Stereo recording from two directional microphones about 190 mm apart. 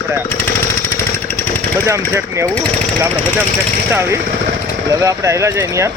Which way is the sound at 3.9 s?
10° right (ahead or behind).